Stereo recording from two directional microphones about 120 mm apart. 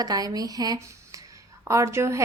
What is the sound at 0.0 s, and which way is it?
A woman's voice, 30° right (ahead or behind).